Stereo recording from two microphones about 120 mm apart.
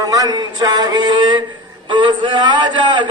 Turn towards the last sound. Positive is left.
turn(degrees=-40)  # may be behind; listen again after turning